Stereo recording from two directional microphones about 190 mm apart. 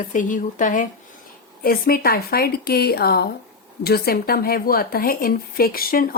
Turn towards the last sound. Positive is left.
turn(degrees=50)  # may be behind; listen again after turning